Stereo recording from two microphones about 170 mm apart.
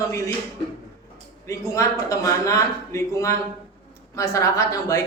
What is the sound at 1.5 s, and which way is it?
A man's voice, 20° left (ahead or behind).